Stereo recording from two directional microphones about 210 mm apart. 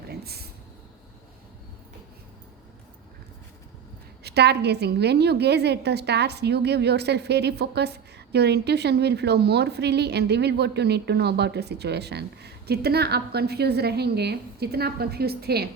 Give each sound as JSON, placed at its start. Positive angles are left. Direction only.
{"t": 0.1, "sound": "vehicle", "side_deg": -50}
{"t": 4.2, "sound": "a woman's voice", "side_deg": -50}